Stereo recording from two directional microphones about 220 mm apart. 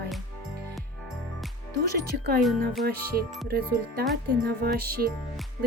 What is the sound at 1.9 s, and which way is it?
Speech, 45° right (ahead or behind).